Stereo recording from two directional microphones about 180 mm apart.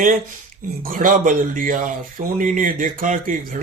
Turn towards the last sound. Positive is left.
turn(degrees=-50)  # may be behind; listen again after turning